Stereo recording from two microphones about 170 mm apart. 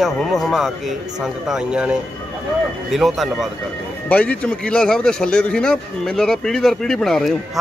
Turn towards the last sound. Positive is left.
turn(degrees=0)  # may be behind; listen again after turning